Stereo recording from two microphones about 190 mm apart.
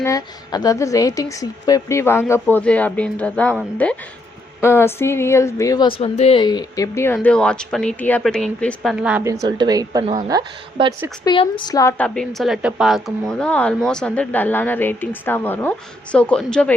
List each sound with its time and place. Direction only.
0.0 s a woman's voice: 20° left (ahead or behind); by 3.9 s centre (ahead or behind)
4.6 s a woman's voice: 15° left (ahead or behind); by 9.2 s 5° right (ahead or behind)
9.2 s a woman's voice: 15° right (ahead or behind)
11.3 s a woman's voice: 25° left (ahead or behind); by 16.7 s 5° left (ahead or behind)